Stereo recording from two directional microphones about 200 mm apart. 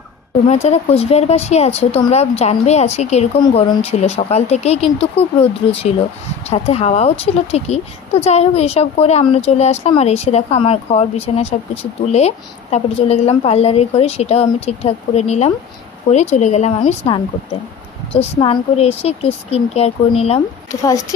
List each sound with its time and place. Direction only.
0.5 s a child's voice: 30° left (ahead or behind)